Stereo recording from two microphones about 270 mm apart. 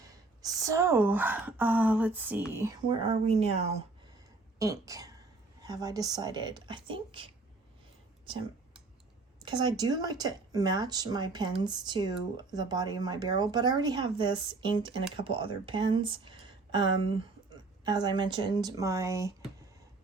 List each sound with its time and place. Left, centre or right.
0.1 s a woman's voice: centre
4.6 s speech: centre
9.4 s speech: centre